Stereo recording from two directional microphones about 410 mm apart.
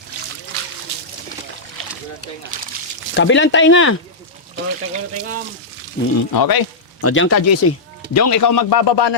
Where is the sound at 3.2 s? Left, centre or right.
Left.